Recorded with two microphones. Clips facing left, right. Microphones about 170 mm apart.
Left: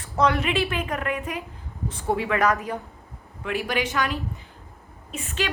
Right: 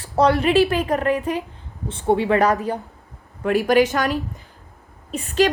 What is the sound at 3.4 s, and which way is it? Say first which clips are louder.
A woman's voice: right 10 dB; 45° right (ahead or behind).